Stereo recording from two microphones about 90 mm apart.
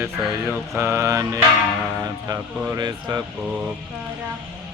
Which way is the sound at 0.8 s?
30° right (ahead or behind).